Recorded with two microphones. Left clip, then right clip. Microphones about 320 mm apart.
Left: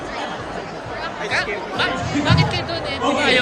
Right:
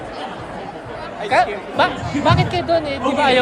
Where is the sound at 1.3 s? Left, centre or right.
Centre.